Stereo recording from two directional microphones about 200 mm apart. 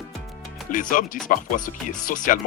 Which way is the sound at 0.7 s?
40° left (ahead or behind).